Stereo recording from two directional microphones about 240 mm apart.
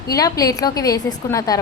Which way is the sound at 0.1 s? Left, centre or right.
Centre.